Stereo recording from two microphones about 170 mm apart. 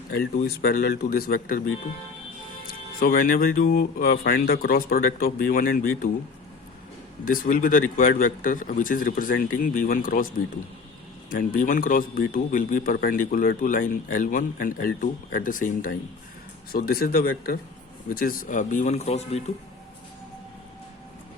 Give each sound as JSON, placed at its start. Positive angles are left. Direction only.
{"t": 0.1, "sound": "speech", "side_deg": 65}
{"t": 7.3, "sound": "speech", "side_deg": 55}